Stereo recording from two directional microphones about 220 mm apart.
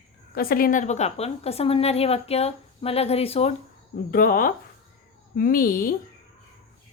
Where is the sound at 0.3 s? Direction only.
40° left (ahead or behind).